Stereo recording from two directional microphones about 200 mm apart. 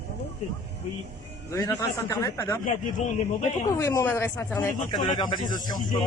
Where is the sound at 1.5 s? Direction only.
15° left (ahead or behind).